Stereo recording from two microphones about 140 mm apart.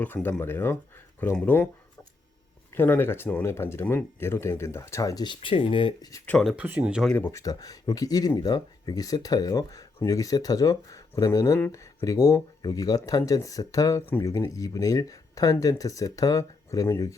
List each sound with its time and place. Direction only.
0.0 s speech: 15° left (ahead or behind)
2.7 s speech: 15° left (ahead or behind); by 6.1 s 35° left (ahead or behind)
6.2 s speech: 5° left (ahead or behind)
7.1 s speech: 15° left (ahead or behind)